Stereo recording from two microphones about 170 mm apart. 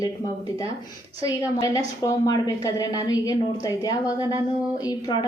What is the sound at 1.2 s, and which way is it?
A woman's voice, 20° left (ahead or behind).